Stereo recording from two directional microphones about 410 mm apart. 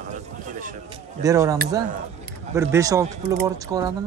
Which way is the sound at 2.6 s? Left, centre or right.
Centre.